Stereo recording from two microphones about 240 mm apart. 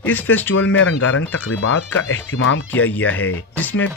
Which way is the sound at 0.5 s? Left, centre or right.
Left.